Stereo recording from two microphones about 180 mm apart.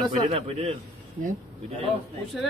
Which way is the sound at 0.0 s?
30° right (ahead or behind).